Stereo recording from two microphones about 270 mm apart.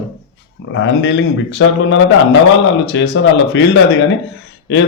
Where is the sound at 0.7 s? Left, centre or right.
Left.